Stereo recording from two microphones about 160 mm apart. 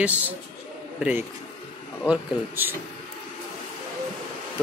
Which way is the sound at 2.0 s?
10° right (ahead or behind).